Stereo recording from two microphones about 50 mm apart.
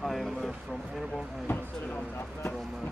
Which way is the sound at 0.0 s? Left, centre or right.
Centre.